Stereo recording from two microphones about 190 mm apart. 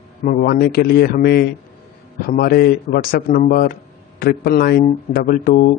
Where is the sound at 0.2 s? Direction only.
45° left (ahead or behind).